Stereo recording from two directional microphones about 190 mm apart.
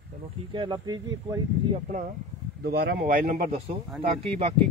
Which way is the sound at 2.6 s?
55° right (ahead or behind).